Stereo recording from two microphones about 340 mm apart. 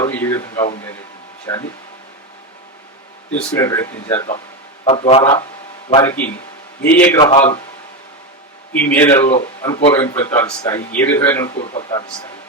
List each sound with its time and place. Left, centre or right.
0.0 s speech: centre
3.6 s speech: centre
8.7 s speech: centre